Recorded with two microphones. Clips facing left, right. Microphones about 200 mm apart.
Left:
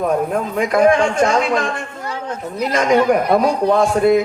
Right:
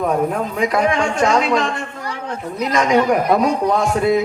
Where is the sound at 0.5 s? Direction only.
50° left (ahead or behind).